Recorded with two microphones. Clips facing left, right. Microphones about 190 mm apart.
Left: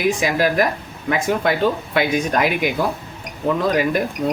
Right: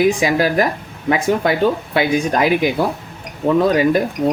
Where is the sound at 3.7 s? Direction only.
25° right (ahead or behind).